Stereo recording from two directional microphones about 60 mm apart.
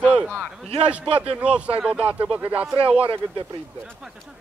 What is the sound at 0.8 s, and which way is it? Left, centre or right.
Speech, centre.